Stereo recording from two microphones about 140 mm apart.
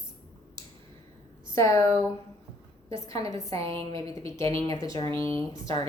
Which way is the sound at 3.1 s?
25° left (ahead or behind).